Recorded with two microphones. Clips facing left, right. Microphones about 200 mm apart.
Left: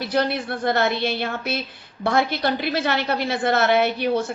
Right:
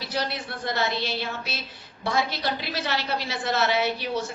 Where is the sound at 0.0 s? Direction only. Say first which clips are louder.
Left 8 dB; 55° left (ahead or behind).